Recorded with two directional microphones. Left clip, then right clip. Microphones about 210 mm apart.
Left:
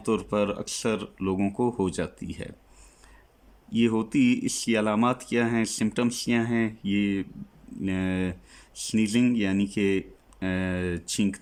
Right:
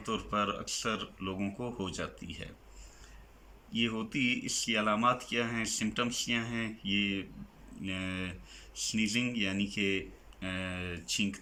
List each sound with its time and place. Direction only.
0.0 s speech: 50° left (ahead or behind)
3.7 s speech: 50° left (ahead or behind)